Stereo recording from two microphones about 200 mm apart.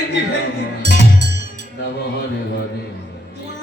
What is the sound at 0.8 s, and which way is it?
Music, 55° right (ahead or behind).